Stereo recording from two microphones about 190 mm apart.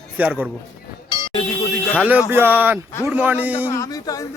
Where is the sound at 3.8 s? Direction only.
20° left (ahead or behind).